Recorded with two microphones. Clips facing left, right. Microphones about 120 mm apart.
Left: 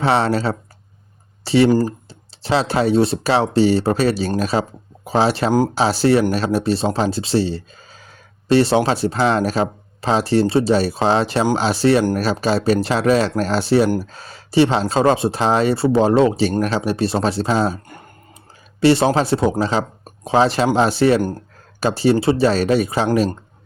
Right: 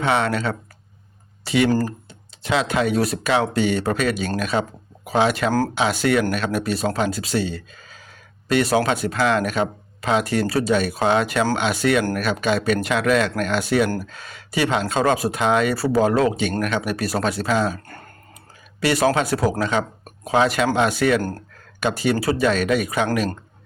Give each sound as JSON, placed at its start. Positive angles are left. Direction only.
{"t": 0.0, "sound": "speech", "side_deg": 35}
{"t": 5.5, "sound": "speech", "side_deg": 15}
{"t": 5.7, "sound": "speech", "side_deg": 35}
{"t": 17.8, "sound": "speech", "side_deg": 15}
{"t": 18.8, "sound": "speech", "side_deg": 30}
{"t": 21.2, "sound": "speech", "side_deg": 15}
{"t": 21.8, "sound": "speech", "side_deg": 30}